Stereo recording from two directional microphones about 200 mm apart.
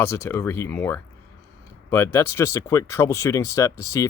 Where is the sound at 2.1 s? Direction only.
15° left (ahead or behind).